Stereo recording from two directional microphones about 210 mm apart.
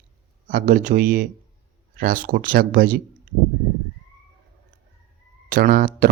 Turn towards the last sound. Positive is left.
turn(degrees=-45)  # may be behind; listen again after turning